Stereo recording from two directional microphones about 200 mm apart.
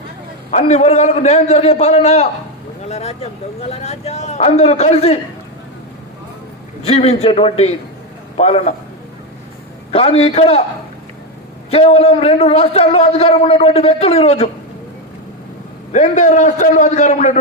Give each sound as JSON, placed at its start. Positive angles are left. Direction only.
{"t": 0.5, "sound": "a man's voice", "side_deg": 35}
{"t": 6.8, "sound": "a man's voice", "side_deg": 30}
{"t": 9.9, "sound": "a man's voice", "side_deg": 30}
{"t": 11.7, "sound": "a man's voice", "side_deg": 30}
{"t": 15.9, "sound": "a man's voice", "side_deg": 35}